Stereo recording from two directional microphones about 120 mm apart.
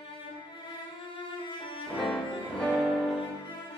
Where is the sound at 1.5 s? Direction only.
45° left (ahead or behind).